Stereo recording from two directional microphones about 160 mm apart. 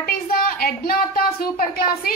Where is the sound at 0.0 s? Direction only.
65° left (ahead or behind).